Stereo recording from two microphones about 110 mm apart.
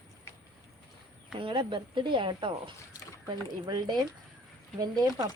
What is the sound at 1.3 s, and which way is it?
Speech, 50° right (ahead or behind).